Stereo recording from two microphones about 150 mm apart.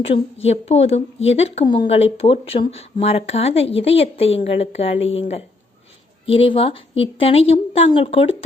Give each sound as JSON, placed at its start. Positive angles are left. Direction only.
{"t": 0.0, "sound": "speech", "side_deg": 40}